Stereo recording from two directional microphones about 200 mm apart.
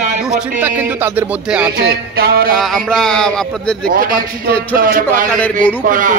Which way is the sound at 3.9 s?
45° right (ahead or behind).